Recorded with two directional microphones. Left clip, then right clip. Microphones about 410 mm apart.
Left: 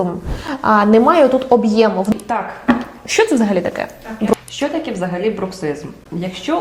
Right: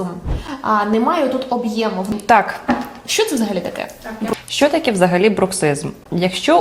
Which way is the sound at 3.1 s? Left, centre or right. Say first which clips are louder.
Left 4 dB; centre.